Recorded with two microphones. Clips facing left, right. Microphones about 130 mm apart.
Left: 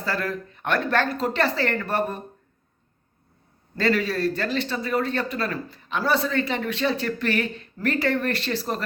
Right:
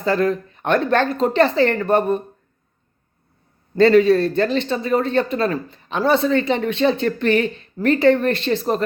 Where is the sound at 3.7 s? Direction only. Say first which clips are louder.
Right 11 dB; 25° right (ahead or behind).